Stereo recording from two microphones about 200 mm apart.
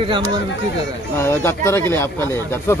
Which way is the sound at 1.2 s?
10° left (ahead or behind).